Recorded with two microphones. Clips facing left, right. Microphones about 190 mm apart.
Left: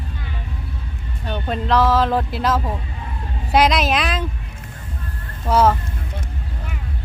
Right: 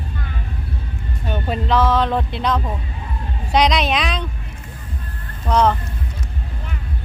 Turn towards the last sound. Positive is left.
turn(degrees=5)  # may be behind; listen again after turning